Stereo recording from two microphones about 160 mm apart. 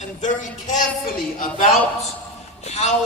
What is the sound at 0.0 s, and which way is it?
Speech, 50° left (ahead or behind).